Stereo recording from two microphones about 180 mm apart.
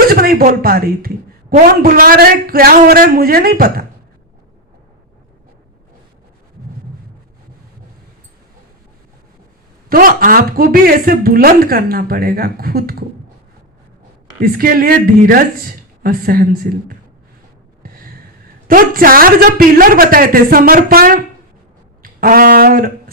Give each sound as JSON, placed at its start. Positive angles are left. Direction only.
{"t": 0.1, "sound": "a woman's voice", "side_deg": -55}
{"t": 9.9, "sound": "a woman's voice", "side_deg": -50}
{"t": 14.4, "sound": "a woman's voice", "side_deg": -55}
{"t": 18.7, "sound": "a woman's voice", "side_deg": -50}
{"t": 22.0, "sound": "brass instrument", "side_deg": -55}